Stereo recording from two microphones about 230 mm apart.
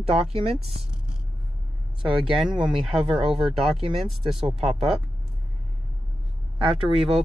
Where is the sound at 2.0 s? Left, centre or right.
Centre.